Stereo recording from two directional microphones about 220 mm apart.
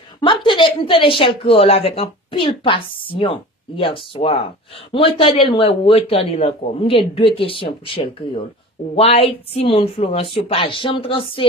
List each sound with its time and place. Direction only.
0.2 s a woman's voice: 20° left (ahead or behind)